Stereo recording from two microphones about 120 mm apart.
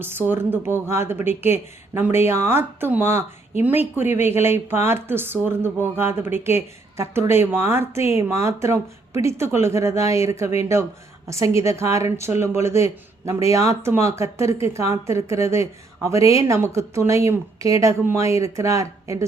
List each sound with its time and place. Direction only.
0.0 s speech: 20° right (ahead or behind)